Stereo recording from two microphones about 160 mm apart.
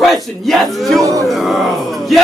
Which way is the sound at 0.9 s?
20° right (ahead or behind).